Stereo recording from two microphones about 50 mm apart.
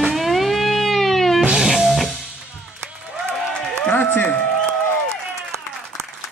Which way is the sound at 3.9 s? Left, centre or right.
Left.